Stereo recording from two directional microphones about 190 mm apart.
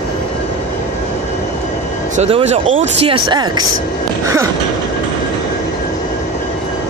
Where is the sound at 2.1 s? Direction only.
35° right (ahead or behind).